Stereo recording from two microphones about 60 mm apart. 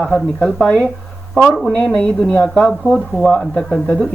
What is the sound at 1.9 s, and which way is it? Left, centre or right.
Speech, centre.